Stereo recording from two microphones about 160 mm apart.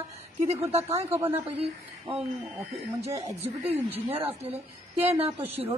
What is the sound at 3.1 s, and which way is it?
Speech, 20° right (ahead or behind).